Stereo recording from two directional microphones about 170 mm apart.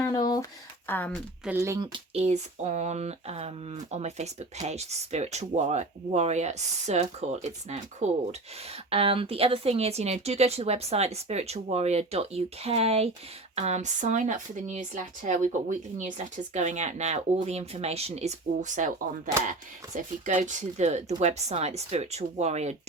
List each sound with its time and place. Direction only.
0.0 s a sound: 20° left (ahead or behind)
0.9 s speech: 10° left (ahead or behind)
1.5 s speech: 15° right (ahead or behind)
2.1 s speech: 40° right (ahead or behind)